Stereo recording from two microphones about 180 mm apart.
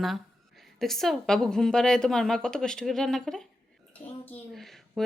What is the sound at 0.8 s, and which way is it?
A woman's voice, centre (ahead or behind).